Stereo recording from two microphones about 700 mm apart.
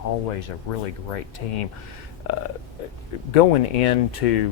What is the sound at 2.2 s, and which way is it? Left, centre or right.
Speech, left.